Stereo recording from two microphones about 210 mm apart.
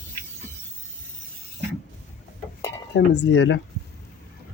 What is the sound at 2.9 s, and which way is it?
Speech, 55° left (ahead or behind).